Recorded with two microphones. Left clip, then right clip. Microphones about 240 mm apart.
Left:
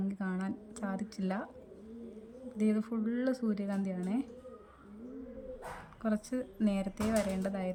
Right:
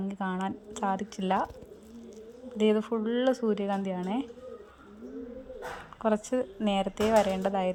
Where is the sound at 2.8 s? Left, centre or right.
Left.